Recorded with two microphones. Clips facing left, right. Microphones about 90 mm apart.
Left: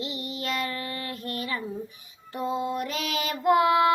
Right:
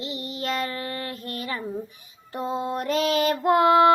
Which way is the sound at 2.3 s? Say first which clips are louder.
Right 1 dB; 30° right (ahead or behind).